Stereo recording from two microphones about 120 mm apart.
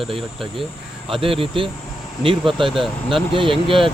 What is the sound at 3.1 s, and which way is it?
Speech, 45° right (ahead or behind).